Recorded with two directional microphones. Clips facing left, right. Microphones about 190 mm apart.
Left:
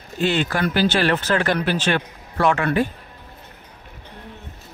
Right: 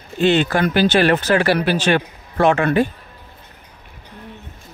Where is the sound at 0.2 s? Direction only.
25° right (ahead or behind).